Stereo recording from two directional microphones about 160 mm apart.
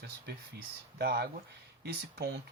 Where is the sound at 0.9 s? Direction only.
70° right (ahead or behind).